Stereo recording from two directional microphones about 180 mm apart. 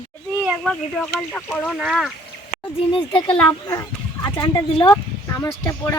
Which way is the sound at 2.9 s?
30° left (ahead or behind).